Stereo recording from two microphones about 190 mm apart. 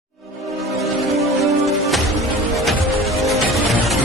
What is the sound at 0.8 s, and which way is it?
Music, centre (ahead or behind).